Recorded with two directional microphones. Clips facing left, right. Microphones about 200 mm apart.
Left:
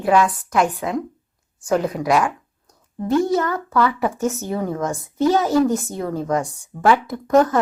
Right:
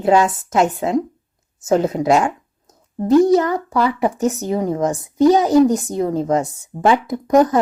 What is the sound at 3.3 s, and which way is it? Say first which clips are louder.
Speech: right 3 dB; 20° right (ahead or behind).